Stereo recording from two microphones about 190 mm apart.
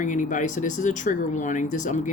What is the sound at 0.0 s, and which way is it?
Speech, 40° left (ahead or behind).